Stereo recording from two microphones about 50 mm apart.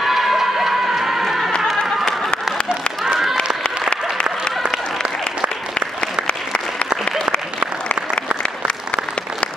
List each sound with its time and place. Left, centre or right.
0.0 s crowd: centre
3.1 s a sound: centre
3.9 s applause: centre
6.2 s applause: centre
8.4 s applause: left